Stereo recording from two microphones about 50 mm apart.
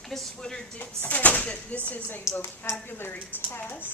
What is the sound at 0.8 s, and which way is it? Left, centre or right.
Speech, left.